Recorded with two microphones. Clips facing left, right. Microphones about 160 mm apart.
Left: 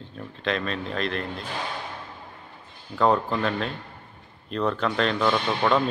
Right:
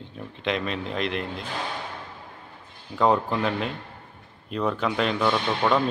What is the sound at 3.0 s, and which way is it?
Speech, 15° right (ahead or behind).